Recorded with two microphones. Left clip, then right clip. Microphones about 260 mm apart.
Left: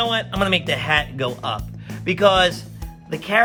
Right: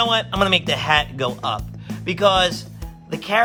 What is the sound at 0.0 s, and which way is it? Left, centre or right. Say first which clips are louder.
Speech: right 2 dB; centre.